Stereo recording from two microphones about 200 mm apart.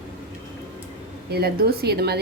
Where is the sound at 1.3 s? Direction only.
50° right (ahead or behind).